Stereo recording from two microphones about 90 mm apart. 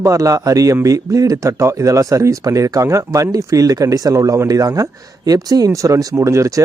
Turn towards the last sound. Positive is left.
turn(degrees=-35)  # may be behind; listen again after turning